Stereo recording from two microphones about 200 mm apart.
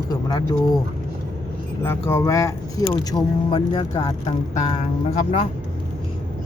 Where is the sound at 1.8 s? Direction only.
15° left (ahead or behind); by 4.8 s 30° left (ahead or behind).